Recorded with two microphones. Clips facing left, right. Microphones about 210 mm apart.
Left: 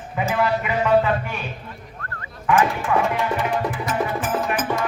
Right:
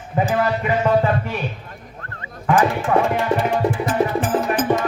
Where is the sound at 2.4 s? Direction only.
40° right (ahead or behind).